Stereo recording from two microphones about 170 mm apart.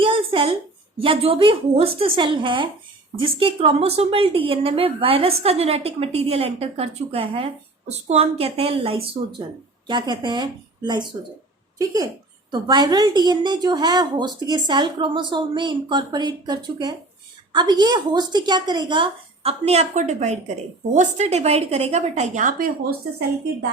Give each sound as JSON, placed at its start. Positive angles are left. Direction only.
{"t": 0.0, "sound": "a sound", "side_deg": -30}
{"t": 1.0, "sound": "a woman's voice", "side_deg": -35}
{"t": 12.5, "sound": "a woman's voice", "side_deg": -25}